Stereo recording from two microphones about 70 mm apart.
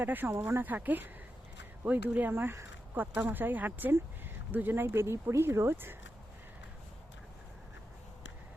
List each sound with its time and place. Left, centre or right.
0.0 s speech: right